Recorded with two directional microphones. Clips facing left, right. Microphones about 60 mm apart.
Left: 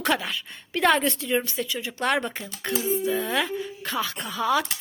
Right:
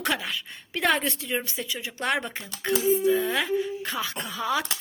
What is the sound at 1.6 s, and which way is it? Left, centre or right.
Speech, centre.